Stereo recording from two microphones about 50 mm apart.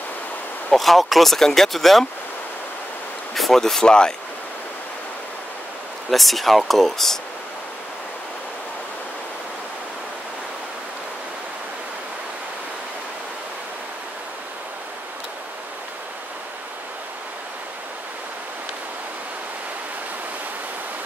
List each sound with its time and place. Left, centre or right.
0.7 s speech: centre
3.3 s speech: centre
6.0 s speech: centre